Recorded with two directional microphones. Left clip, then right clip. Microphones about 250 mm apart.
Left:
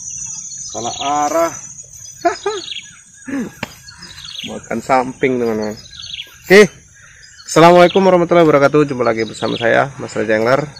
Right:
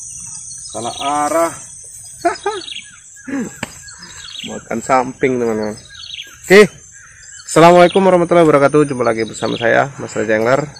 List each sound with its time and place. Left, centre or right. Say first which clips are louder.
1.1 s speech: even; centre
2.5 s a man's voice: left 1 dB; centre
3.3 s a sound: even; centre
4.3 s a man's voice: even; centre